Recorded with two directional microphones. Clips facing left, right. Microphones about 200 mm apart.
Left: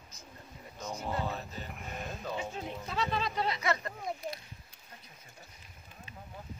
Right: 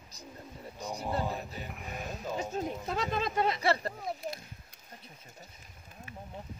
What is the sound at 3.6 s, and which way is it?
Speech, 30° right (ahead or behind).